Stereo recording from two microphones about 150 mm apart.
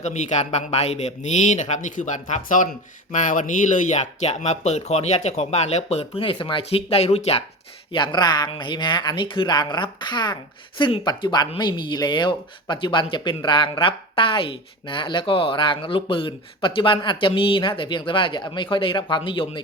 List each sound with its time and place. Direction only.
0.0 s speech: 50° left (ahead or behind)
7.9 s speech: 30° left (ahead or behind)